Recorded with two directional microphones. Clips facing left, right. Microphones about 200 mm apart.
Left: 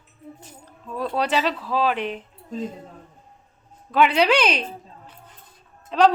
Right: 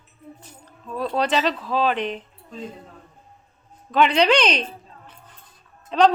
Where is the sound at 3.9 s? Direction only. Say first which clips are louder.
Right 1 dB; 5° left (ahead or behind).